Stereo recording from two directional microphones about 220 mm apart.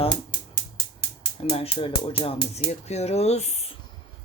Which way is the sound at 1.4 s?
25° left (ahead or behind).